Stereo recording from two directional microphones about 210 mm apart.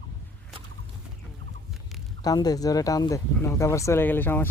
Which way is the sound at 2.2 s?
20° left (ahead or behind).